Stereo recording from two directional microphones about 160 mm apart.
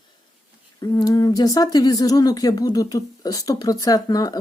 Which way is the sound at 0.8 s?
25° left (ahead or behind).